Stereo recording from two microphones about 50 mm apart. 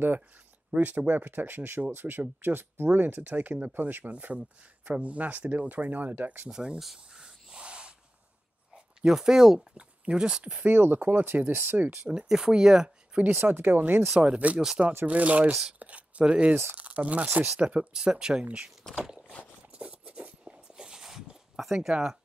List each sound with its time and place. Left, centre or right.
0.7 s speech: right
6.5 s speech: centre
6.8 s a sound: centre
8.7 s speech: centre
10.6 s speech: right
12.3 s speech: centre
13.5 s speech: right
14.1 s speech: centre
19.7 s a sound: right
20.4 s a sound: centre